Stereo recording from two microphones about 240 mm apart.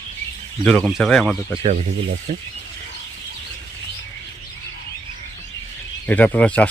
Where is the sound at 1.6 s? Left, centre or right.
Right.